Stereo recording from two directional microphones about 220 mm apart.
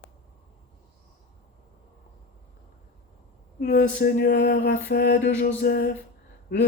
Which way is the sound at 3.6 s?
45° left (ahead or behind).